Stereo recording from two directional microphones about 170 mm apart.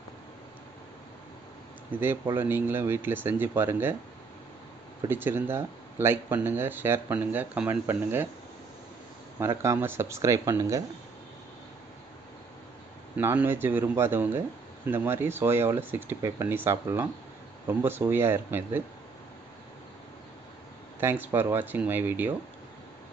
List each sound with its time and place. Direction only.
2.3 s speech: 10° right (ahead or behind)
5.0 s speech: 15° right (ahead or behind)
9.4 s speech: 15° right (ahead or behind)
13.2 s speech: 15° right (ahead or behind)
21.0 s speech: 15° right (ahead or behind)